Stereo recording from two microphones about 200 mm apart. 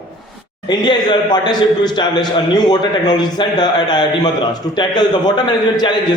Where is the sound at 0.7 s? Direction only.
20° left (ahead or behind).